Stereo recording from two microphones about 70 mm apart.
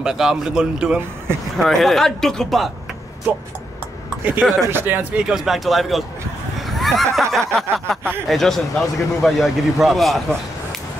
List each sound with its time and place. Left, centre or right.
0.0 s a man's voice: centre
1.6 s a man's voice: centre
4.2 s speech: right
5.3 s a man's voice: centre
6.6 s neigh: centre
7.2 s a sound: centre
8.3 s a man's voice: centre